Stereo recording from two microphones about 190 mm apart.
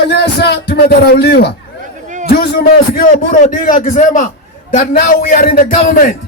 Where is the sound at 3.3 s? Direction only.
40° left (ahead or behind).